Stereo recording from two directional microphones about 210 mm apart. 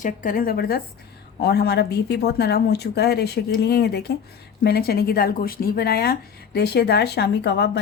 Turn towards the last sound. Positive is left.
turn(degrees=55)  # may be behind; listen again after turning